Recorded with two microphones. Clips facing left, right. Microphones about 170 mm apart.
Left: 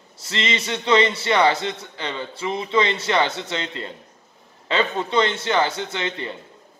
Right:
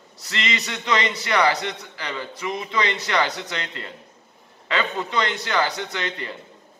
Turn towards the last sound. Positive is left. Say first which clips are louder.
# left 2 dB
turn(degrees=25)  # may be behind; listen again after turning